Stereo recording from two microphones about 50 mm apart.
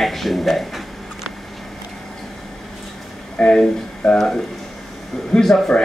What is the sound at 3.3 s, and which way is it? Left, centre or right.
Speech, centre.